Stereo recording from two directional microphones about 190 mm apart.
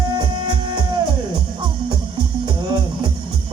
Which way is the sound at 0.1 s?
25° right (ahead or behind).